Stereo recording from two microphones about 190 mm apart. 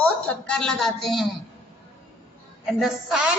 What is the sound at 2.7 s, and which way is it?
Speech, centre (ahead or behind).